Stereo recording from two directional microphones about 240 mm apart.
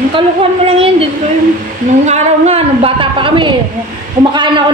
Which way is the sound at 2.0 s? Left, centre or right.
Right.